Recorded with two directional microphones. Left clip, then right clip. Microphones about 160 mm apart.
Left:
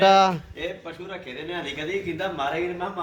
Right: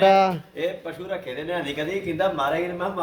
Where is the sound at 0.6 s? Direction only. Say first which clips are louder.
Right 4 dB; 30° right (ahead or behind).